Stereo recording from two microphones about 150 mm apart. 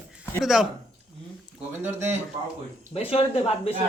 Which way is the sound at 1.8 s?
15° right (ahead or behind).